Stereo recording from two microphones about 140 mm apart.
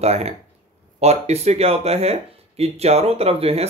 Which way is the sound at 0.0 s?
50° right (ahead or behind).